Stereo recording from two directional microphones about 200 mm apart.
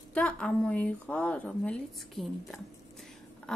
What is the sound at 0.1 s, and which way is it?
A woman's voice, 5° left (ahead or behind).